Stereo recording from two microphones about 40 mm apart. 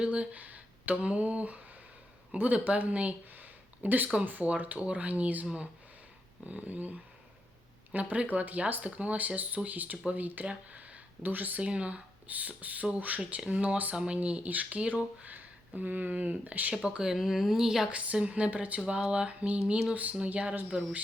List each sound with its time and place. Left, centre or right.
0.0 s a sound: right
1.0 s speech: right
3.3 s a sound: right
4.4 s speech: right
7.9 s speech: right
10.7 s a sound: right
11.3 s speech: right
11.6 s speech: right
13.9 s speech: right
14.2 s speech: right
15.2 s speech: right
16.7 s speech: right
17.1 s speech: centre
17.9 s speech: right